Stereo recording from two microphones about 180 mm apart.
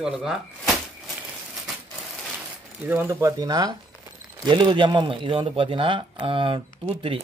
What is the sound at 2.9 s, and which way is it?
Speech, 15° right (ahead or behind).